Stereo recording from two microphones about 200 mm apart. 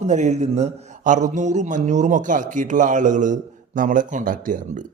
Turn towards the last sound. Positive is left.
turn(degrees=-40)  # may be behind; listen again after turning